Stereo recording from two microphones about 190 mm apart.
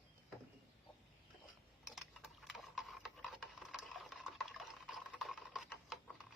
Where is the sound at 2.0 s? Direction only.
Centre (ahead or behind).